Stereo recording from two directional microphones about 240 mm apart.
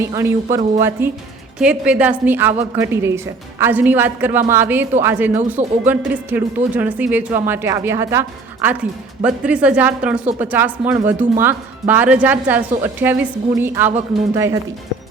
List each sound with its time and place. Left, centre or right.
0.5 s a woman's voice: centre